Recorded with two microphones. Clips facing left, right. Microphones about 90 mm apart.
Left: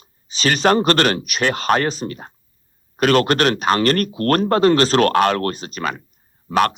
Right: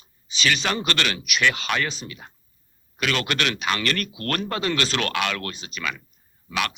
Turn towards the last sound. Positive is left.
turn(degrees=45)  # may be behind; listen again after turning